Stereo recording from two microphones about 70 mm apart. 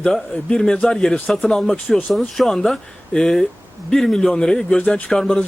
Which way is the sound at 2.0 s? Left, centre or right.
Centre.